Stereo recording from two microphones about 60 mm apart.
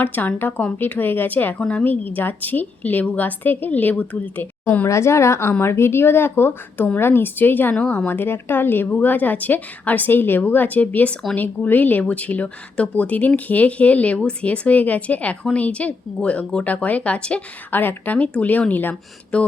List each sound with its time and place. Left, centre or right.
0.0 s speech: left
1.5 s a woman's voice: centre
1.8 s speech: left
4.9 s speech: left; by 17.4 s centre
17.7 s speech: left
19.3 s speech: centre